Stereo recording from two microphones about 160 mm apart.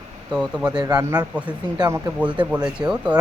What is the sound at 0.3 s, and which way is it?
Speech, 5° right (ahead or behind).